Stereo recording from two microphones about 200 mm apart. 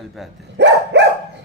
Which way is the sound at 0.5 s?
60° right (ahead or behind).